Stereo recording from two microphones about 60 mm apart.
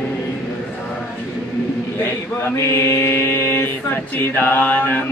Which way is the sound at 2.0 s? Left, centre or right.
Left.